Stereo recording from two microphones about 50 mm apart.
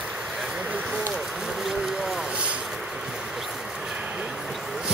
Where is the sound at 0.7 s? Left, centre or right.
Right.